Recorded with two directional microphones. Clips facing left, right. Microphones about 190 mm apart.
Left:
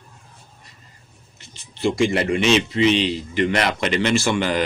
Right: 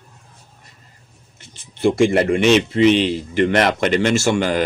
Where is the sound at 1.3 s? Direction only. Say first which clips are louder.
Right 1 dB; 55° right (ahead or behind).